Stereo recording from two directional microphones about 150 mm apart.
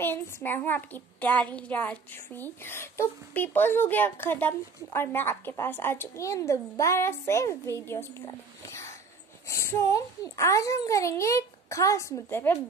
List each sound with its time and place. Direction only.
0.0 s a child's voice: 15° left (ahead or behind)
8.6 s a sound: 20° left (ahead or behind)
9.5 s a child's voice: 20° left (ahead or behind)